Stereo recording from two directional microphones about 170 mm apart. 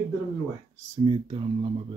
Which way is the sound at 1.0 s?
30° right (ahead or behind).